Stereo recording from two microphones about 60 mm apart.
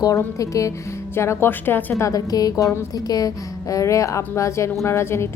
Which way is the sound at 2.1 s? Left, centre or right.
Left.